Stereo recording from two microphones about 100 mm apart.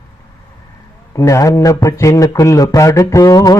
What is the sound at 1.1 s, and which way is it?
A man's voice, 35° left (ahead or behind).